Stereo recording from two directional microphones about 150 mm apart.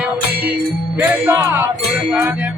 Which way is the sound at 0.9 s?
15° right (ahead or behind).